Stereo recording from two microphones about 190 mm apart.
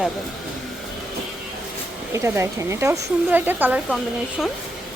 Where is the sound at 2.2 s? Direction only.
15° right (ahead or behind).